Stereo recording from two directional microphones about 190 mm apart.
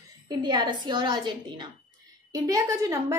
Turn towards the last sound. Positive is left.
turn(degrees=-20)  # may be behind; listen again after turning